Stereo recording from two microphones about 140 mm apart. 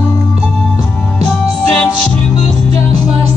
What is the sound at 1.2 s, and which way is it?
Music, 5° left (ahead or behind).